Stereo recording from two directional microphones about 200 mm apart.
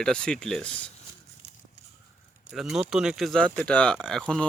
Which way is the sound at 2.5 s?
Centre (ahead or behind).